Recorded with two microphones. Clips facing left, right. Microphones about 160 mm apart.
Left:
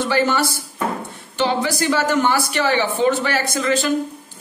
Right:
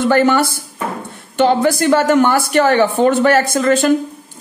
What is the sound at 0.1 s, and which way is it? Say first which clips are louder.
A woman's voice: right 5 dB; 50° right (ahead or behind).